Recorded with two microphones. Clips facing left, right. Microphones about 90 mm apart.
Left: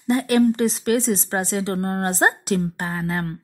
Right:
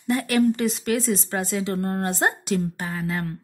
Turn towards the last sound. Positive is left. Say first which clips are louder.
# left 2 dB
turn(degrees=40)  # may be behind; listen again after turning